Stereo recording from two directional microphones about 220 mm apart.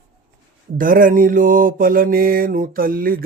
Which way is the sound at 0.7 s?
40° right (ahead or behind).